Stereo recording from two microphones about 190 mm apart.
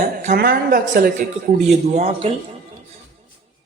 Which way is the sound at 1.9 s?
35° right (ahead or behind).